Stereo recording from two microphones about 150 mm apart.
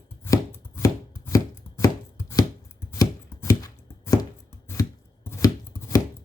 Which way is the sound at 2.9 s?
20° left (ahead or behind).